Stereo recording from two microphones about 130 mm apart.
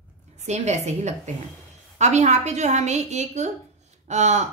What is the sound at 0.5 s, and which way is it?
A woman's voice, 60° right (ahead or behind).